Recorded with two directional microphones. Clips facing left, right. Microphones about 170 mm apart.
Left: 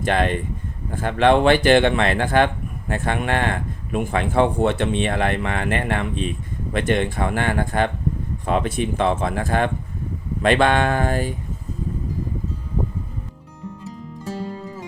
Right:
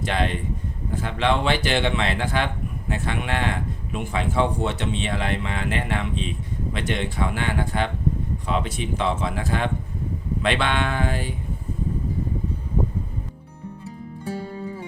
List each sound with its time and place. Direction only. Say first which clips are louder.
0.0 s speech: left 4 dB; 50° left (ahead or behind)